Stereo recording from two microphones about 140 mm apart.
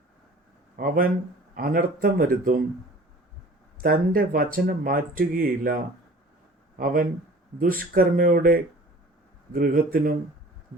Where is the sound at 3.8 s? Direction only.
90° right.